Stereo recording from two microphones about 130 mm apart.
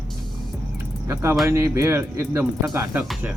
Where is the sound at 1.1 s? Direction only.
20° right (ahead or behind).